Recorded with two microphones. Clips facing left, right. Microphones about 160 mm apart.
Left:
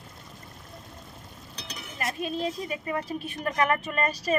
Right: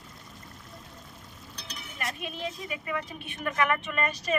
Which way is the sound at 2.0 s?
35° left (ahead or behind).